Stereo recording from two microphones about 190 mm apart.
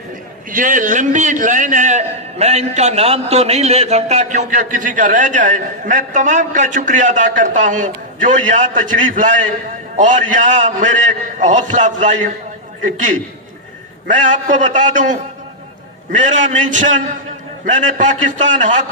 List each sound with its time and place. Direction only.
0.5 s a man's voice: 45° right (ahead or behind)